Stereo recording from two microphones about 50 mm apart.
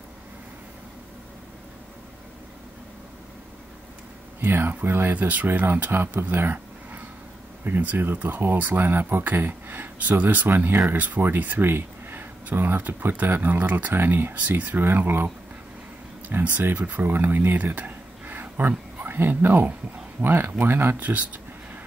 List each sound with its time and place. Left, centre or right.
4.4 s speech: right
5.1 s speech: right
6.3 s a sound: right
7.6 s speech: right
11.6 s speech: right
13.9 s speech: right